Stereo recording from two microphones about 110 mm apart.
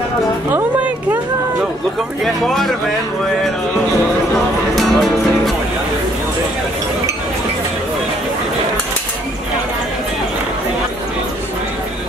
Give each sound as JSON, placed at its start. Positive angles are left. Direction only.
{"t": 0.5, "sound": "music", "side_deg": -20}
{"t": 2.2, "sound": "speech", "side_deg": 0}
{"t": 4.7, "sound": "music", "side_deg": 0}